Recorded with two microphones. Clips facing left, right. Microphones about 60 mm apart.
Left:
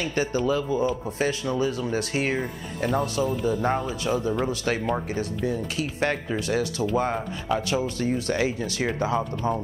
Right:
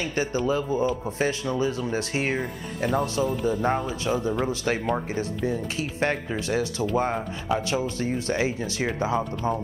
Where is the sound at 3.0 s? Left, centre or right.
Right.